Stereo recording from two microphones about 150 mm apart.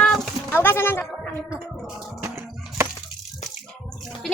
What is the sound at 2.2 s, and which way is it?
Music, 15° right (ahead or behind).